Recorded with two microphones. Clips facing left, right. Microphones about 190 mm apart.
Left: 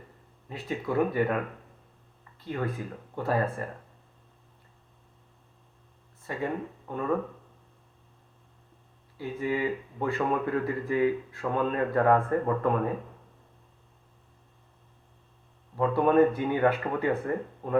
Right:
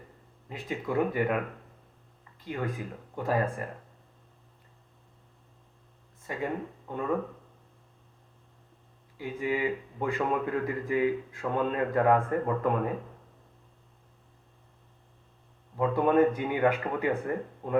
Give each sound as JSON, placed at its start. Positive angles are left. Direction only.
{"t": 0.4, "sound": "a man's voice", "side_deg": -20}
{"t": 2.4, "sound": "a man's voice", "side_deg": -15}
{"t": 6.2, "sound": "speech", "side_deg": -15}
{"t": 9.1, "sound": "a man's voice", "side_deg": -15}
{"t": 16.0, "sound": "a man's voice", "side_deg": -15}